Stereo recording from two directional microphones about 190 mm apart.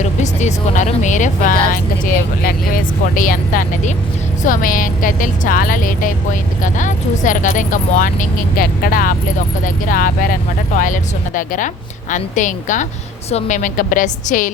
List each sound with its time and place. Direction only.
0.0 s a woman's voice: 40° left (ahead or behind)